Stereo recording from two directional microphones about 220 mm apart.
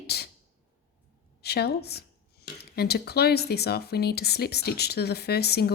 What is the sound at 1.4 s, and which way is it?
Speech, 45° left (ahead or behind).